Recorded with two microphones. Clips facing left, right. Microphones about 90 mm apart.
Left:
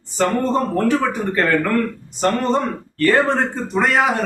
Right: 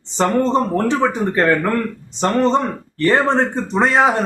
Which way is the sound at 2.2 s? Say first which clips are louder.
Right 2 dB; 20° right (ahead or behind).